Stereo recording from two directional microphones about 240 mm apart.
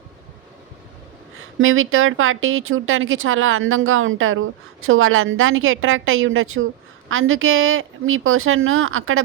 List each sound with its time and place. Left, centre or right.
1.5 s speech: right